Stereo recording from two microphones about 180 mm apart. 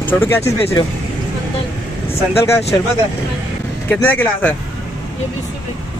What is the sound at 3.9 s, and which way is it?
Speech, 10° left (ahead or behind).